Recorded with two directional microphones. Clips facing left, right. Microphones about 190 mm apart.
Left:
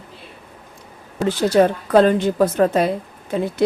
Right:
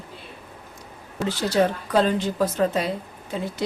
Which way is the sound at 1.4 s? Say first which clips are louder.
Left 6 dB; 55° left (ahead or behind).